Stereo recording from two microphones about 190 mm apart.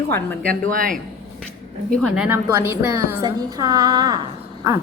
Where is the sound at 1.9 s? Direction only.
5° right (ahead or behind); by 4.1 s 20° right (ahead or behind).